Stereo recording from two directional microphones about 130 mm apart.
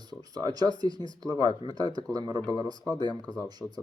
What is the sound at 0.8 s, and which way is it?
Speech, 30° right (ahead or behind).